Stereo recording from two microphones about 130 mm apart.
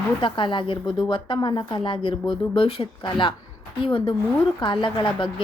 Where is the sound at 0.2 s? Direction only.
40° left (ahead or behind).